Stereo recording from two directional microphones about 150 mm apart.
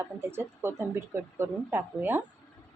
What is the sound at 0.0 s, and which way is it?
Speech, 15° right (ahead or behind).